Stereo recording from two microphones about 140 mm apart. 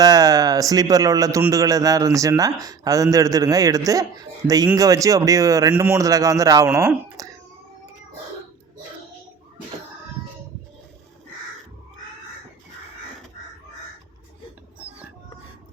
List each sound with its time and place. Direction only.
0.0 s a man's voice: 25° right (ahead or behind)